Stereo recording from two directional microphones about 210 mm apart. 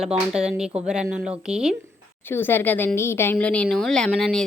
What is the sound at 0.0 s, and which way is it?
A woman's voice, 5° right (ahead or behind).